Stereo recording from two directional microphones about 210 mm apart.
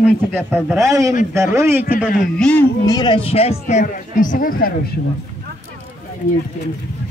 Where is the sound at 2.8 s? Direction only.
20° left (ahead or behind); by 5.1 s 50° left (ahead or behind).